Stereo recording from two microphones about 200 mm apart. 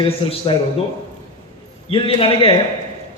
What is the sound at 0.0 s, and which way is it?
Speech, 25° left (ahead or behind).